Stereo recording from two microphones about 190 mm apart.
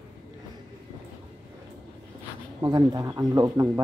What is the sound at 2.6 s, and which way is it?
Speech, 20° right (ahead or behind).